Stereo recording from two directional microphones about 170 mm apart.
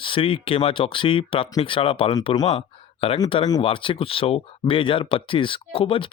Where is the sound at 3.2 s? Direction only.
30° left (ahead or behind).